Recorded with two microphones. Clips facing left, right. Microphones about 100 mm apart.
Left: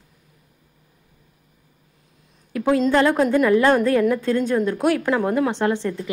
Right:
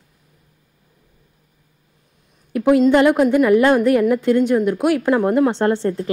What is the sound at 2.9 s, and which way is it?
A woman's voice, 15° right (ahead or behind).